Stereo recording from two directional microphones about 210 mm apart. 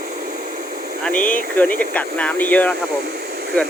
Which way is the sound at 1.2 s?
40° left (ahead or behind).